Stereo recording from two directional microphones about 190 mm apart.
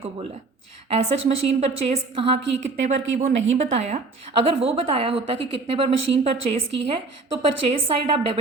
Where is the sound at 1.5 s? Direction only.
30° right (ahead or behind).